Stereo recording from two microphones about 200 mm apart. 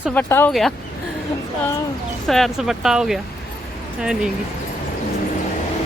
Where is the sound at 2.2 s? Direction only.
Centre (ahead or behind).